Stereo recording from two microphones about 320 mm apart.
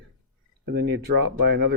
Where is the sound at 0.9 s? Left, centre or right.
Right.